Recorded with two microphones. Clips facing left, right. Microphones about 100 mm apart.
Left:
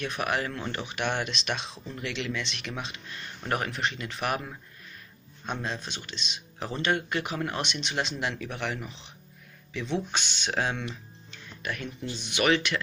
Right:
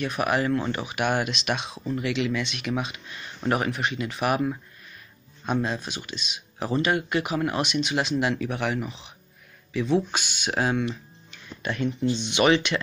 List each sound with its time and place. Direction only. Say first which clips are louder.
0.0 s speech: right 5 dB; 5° right (ahead or behind)
11.6 s speech: right 9 dB; 25° right (ahead or behind)